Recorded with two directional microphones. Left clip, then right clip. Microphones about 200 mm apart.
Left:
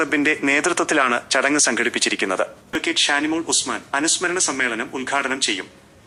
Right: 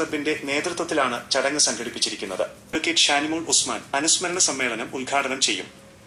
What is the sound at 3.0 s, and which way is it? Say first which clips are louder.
Speech: left 2 dB; 30° left (ahead or behind).